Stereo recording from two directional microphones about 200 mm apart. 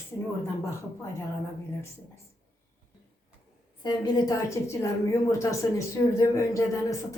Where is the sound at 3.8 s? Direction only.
20° left (ahead or behind).